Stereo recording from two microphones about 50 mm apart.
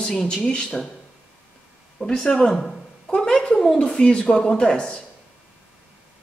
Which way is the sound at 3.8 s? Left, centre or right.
Centre.